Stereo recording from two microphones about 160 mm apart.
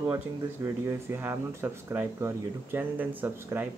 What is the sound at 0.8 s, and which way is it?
Speech, 15° right (ahead or behind).